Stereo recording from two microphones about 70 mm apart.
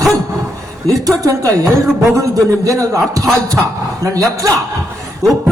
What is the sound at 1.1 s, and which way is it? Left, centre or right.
A man's voice, right.